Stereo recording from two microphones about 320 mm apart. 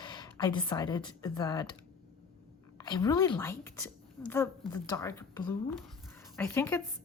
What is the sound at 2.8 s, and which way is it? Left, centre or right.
A woman's voice, centre.